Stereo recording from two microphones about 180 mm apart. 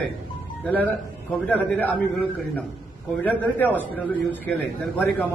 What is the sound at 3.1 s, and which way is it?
Speech, 10° left (ahead or behind).